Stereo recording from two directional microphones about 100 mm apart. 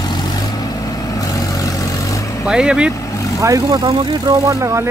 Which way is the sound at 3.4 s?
35° right (ahead or behind).